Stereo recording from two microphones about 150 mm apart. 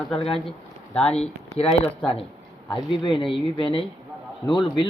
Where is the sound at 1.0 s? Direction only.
45° left (ahead or behind).